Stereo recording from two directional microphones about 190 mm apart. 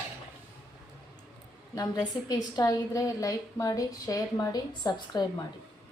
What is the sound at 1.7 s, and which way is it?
A woman's voice, 20° left (ahead or behind).